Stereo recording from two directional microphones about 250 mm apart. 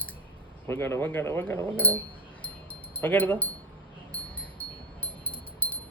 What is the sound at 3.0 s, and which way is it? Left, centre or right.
Speech, centre.